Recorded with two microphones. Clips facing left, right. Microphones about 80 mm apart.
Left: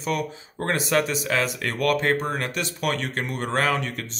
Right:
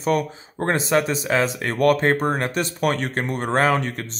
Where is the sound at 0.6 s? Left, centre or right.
Right.